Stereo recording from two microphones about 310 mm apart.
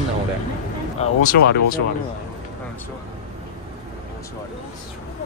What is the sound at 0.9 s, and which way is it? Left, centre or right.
Speech, left.